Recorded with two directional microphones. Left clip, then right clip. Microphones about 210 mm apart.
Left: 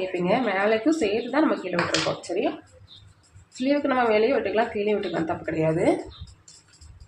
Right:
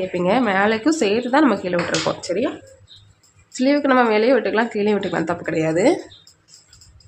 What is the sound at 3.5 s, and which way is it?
A woman's voice, 45° right (ahead or behind).